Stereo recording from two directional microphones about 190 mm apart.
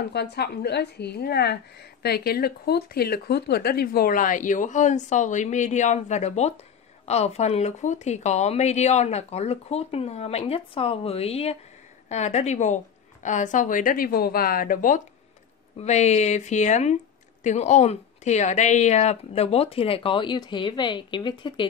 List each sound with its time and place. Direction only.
0.1 s a woman's voice: 60° left (ahead or behind)
15.8 s speech: 35° left (ahead or behind)